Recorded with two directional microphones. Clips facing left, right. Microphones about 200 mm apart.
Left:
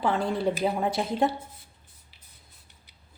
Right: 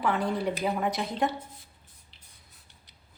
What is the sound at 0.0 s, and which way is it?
A woman's voice, 25° left (ahead or behind).